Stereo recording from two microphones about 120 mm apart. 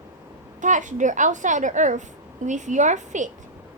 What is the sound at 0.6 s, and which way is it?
A woman's voice, 90° right.